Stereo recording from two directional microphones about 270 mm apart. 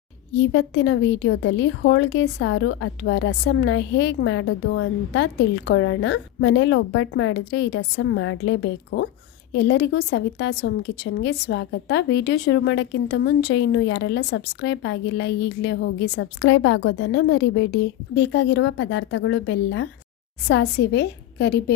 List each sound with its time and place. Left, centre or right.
0.3 s a woman's voice: left